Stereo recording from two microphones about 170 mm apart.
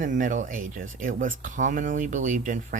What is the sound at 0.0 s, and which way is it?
Speech, 50° right (ahead or behind).